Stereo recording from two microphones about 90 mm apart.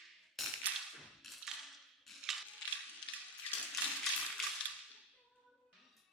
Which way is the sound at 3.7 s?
Centre (ahead or behind).